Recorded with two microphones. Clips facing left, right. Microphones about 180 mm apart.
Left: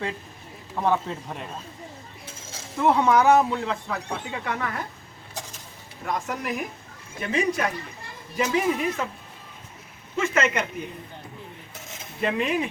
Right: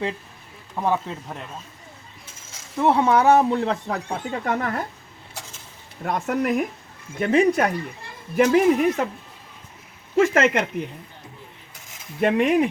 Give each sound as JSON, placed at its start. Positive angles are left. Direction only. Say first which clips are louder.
{"t": 0.8, "sound": "a man's voice", "louder": "even", "side_deg": -5}
{"t": 2.8, "sound": "speech", "louder": "right 2 dB", "side_deg": -30}
{"t": 3.5, "sound": "speech", "louder": "right 5 dB", "side_deg": -40}
{"t": 6.1, "sound": "a woman's voice", "louder": "right 6 dB", "side_deg": -55}
{"t": 10.2, "sound": "speech", "louder": "right 6 dB", "side_deg": -75}
{"t": 12.2, "sound": "a woman's voice", "louder": "right 6 dB", "side_deg": -60}